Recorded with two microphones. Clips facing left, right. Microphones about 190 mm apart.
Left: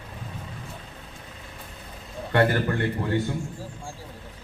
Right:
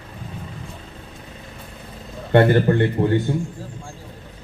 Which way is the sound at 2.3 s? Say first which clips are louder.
Right 7 dB; 25° right (ahead or behind).